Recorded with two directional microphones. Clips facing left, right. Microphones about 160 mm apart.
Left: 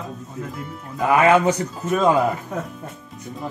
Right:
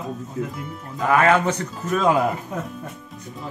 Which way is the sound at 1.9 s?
Centre (ahead or behind).